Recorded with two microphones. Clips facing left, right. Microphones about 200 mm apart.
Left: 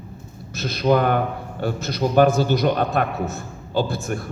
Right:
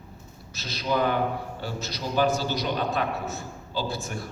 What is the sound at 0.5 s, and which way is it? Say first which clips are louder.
A man's voice: left 9 dB; 55° left (ahead or behind).